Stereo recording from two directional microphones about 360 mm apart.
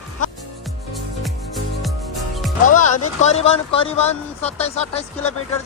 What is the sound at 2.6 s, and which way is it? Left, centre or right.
Speech, left.